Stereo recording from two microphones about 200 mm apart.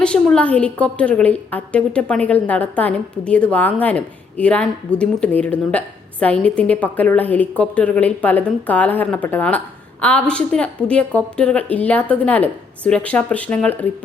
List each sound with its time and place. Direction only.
0.0 s a woman's voice: 5° left (ahead or behind)